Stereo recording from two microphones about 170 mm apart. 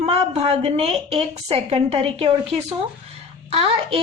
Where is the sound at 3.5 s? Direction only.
35° right (ahead or behind).